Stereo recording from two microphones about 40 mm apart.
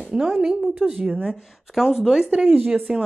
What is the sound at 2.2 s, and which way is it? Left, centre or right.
Speech, right.